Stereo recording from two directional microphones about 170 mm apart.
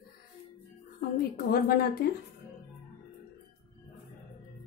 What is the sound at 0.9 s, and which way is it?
A woman's voice, 60° left (ahead or behind).